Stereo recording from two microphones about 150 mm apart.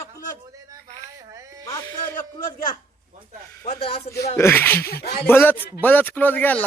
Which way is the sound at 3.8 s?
40° left (ahead or behind).